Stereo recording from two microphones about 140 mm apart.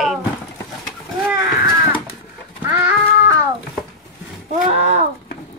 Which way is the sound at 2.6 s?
10° right (ahead or behind).